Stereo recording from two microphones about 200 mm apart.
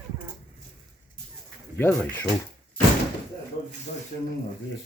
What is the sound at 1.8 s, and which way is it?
Speech, 10° left (ahead or behind).